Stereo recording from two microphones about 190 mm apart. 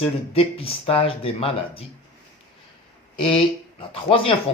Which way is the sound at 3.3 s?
30° left (ahead or behind).